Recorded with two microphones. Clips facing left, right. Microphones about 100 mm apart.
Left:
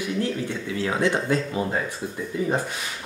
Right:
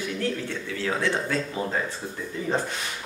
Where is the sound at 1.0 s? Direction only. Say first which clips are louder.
Left 6 dB; 15° left (ahead or behind).